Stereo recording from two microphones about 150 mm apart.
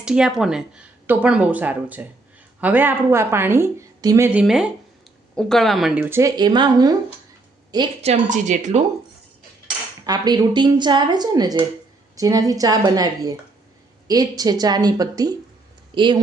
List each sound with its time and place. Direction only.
0.0 s speech: 5° right (ahead or behind); by 4.3 s 20° right (ahead or behind)
4.3 s speech: 5° right (ahead or behind); by 6.9 s 30° right (ahead or behind)
8.0 s speech: 55° right (ahead or behind)
10.1 s speech: 25° right (ahead or behind)